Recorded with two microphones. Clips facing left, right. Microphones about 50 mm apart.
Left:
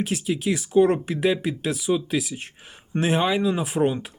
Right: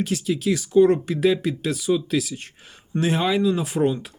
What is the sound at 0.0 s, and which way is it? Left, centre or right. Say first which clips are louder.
Speech: right 1 dB; centre.